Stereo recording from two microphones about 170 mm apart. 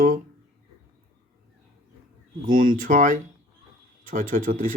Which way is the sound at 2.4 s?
50° right (ahead or behind).